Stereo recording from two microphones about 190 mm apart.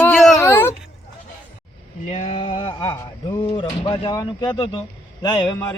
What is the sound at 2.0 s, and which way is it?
Speech, 30° left (ahead or behind).